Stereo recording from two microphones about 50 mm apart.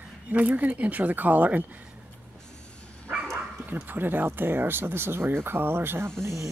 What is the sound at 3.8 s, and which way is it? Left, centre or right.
Speech, right.